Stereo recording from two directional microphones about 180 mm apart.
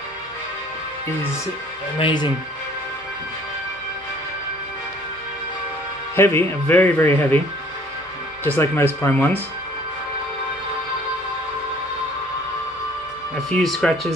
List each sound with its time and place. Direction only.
2.0 s speech: 25° left (ahead or behind)
6.1 s speech: 15° left (ahead or behind)
8.5 s speech: 15° left (ahead or behind)
13.5 s speech: centre (ahead or behind)